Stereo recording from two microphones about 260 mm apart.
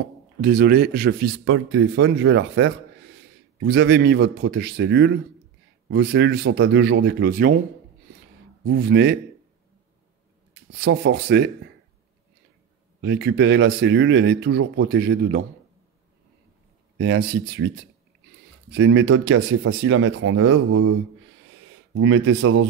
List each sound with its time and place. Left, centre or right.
0.4 s speech: right
1.4 s speech: right
8.6 s speech: right
10.7 s speech: right
13.0 s speech: right
17.0 s speech: right
21.9 s speech: right